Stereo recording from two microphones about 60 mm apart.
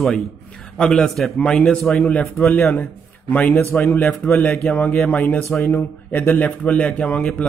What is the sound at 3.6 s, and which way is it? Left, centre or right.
Speech, left.